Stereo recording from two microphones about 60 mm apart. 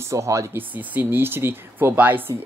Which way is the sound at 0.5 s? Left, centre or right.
Right.